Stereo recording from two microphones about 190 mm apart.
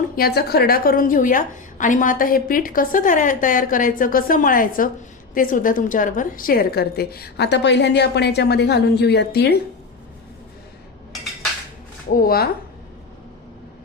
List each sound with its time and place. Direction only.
0.2 s a woman's voice: 55° left (ahead or behind)
12.1 s a woman's voice: 50° left (ahead or behind)